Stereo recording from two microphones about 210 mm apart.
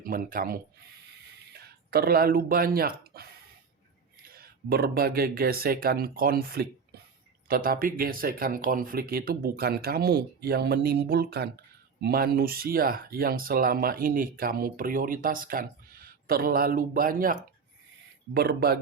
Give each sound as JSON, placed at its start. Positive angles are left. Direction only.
{"t": 0.0, "sound": "speech", "side_deg": -40}
{"t": 18.3, "sound": "speech", "side_deg": -50}